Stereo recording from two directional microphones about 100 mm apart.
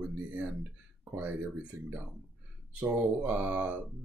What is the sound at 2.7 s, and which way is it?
Speech, 15° right (ahead or behind).